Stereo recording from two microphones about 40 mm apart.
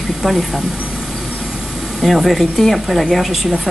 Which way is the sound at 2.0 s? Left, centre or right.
Centre.